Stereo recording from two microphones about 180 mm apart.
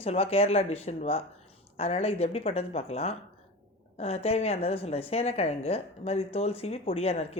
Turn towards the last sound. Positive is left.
turn(degrees=35)  # may be behind; listen again after turning